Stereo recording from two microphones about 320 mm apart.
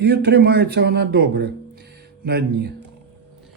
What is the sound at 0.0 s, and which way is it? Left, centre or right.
Speech, right.